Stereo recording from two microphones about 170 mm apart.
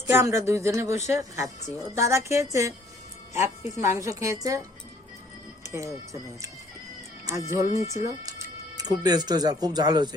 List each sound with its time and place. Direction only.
0.1 s speech: 15° right (ahead or behind)
0.9 s speech: 40° left (ahead or behind)
1.1 s speech: 15° right (ahead or behind)
5.6 s speech: 15° right (ahead or behind)
7.3 s speech: 15° right (ahead or behind)